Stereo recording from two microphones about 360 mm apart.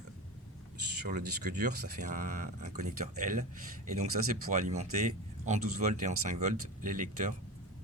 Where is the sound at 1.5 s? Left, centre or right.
Right.